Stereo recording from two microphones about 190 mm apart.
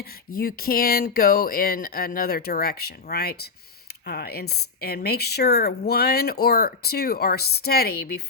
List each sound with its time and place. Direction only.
0.0 s speech: 50° left (ahead or behind)